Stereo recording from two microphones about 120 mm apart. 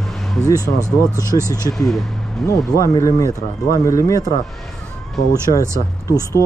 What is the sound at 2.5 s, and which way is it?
Speech, 25° left (ahead or behind).